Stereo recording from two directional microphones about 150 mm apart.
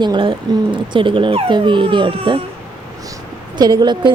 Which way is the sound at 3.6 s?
30° right (ahead or behind).